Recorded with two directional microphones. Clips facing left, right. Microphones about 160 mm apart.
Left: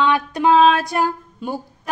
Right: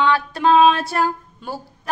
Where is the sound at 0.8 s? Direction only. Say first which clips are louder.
Even; 15° left (ahead or behind).